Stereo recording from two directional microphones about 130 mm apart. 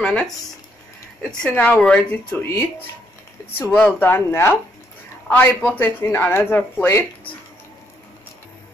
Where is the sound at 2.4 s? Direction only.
20° left (ahead or behind).